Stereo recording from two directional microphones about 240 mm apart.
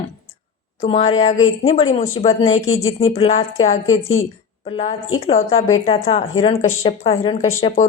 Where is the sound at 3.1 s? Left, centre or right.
Left.